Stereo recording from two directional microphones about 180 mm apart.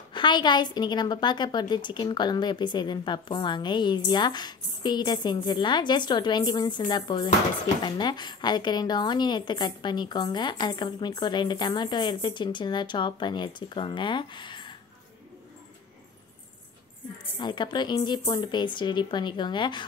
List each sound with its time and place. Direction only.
0.1 s a woman's voice: 25° left (ahead or behind)
17.4 s a woman's voice: 25° left (ahead or behind)